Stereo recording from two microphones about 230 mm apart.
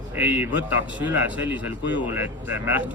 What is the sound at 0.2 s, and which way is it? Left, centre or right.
Speech, centre.